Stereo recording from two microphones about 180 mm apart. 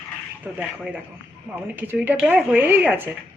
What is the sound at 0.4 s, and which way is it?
Speech, 10° right (ahead or behind).